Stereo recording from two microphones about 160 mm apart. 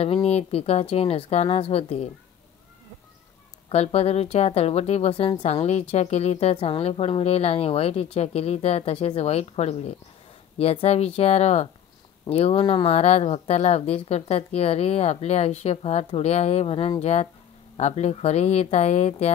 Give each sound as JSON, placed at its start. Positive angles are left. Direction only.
{"t": 0.0, "sound": "speech", "side_deg": 40}
{"t": 3.6, "sound": "speech", "side_deg": 40}